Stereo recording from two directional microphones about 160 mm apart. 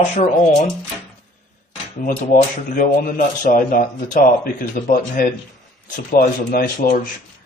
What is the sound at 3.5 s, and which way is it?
Speech, 55° left (ahead or behind).